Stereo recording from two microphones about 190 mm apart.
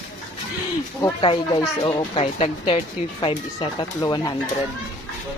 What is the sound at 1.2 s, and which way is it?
Speech, 25° left (ahead or behind).